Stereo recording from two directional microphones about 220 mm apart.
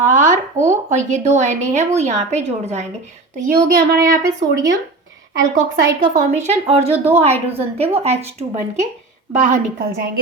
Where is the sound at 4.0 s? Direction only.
15° right (ahead or behind).